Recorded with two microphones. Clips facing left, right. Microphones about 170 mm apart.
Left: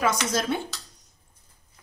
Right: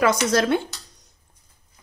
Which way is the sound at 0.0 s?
70° right (ahead or behind).